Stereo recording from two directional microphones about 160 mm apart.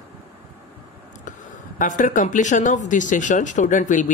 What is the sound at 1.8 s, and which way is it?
Speech, 55° left (ahead or behind).